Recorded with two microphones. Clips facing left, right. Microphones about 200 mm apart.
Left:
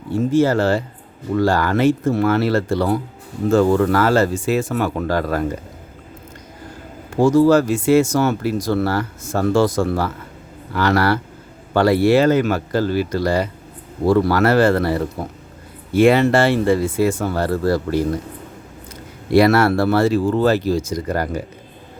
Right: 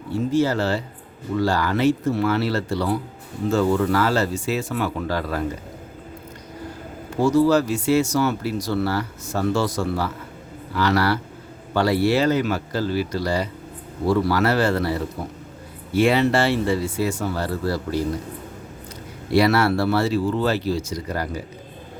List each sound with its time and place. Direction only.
0.2 s speech: 50° left (ahead or behind)
7.2 s speech: 50° left (ahead or behind)
19.3 s speech: 50° left (ahead or behind)